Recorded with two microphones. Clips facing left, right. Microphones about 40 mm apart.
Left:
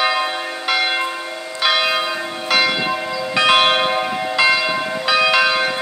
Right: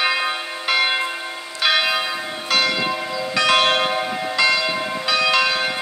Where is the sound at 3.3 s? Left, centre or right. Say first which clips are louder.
Left 3 dB; left.